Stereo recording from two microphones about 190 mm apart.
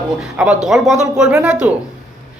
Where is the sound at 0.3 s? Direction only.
5° right (ahead or behind).